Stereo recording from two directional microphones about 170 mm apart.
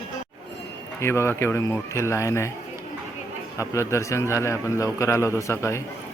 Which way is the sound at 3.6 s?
15° left (ahead or behind).